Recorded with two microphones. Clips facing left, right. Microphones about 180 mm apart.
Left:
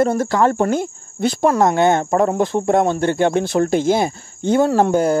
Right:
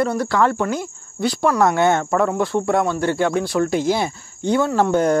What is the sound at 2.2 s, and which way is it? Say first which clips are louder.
Speech: left 2 dB; 20° left (ahead or behind).